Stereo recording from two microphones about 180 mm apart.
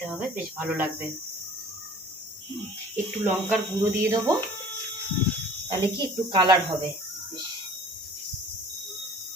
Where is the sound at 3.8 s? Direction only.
15° right (ahead or behind).